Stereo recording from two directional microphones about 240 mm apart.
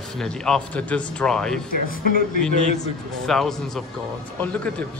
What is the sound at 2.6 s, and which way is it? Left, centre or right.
Speech, left.